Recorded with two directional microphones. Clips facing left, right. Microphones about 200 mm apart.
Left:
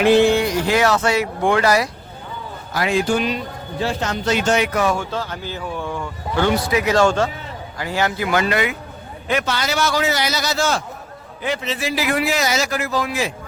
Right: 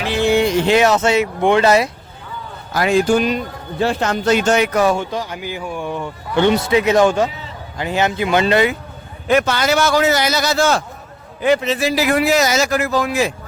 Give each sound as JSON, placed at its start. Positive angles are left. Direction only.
{"t": 0.3, "sound": "speech", "side_deg": -25}
{"t": 2.7, "sound": "speech", "side_deg": -45}
{"t": 4.9, "sound": "speech", "side_deg": -15}
{"t": 9.2, "sound": "speech", "side_deg": -50}